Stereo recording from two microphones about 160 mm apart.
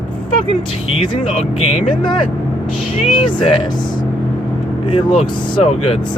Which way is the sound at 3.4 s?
30° left (ahead or behind).